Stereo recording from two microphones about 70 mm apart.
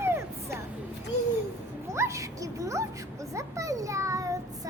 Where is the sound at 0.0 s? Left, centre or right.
Right.